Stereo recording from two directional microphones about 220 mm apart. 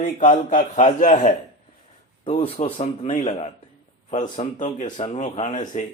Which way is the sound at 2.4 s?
25° left (ahead or behind).